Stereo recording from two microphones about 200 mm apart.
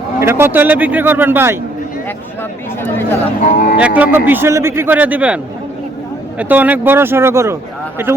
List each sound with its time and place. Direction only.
0.2 s speech: 10° right (ahead or behind)
3.5 s speech: 45° left (ahead or behind)
3.8 s speech: 5° right (ahead or behind)
6.4 s speech: 10° right (ahead or behind)